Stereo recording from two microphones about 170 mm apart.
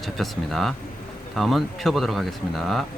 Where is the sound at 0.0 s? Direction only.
Centre (ahead or behind).